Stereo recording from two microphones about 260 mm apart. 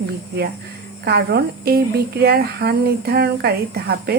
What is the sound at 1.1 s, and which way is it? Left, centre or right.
Speech, right.